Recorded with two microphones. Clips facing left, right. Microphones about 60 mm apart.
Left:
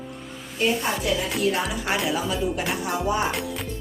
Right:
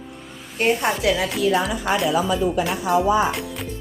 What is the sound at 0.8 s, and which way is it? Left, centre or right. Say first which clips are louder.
Speech: right 4 dB; right.